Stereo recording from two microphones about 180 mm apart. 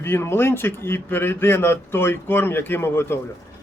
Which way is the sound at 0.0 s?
15° left (ahead or behind).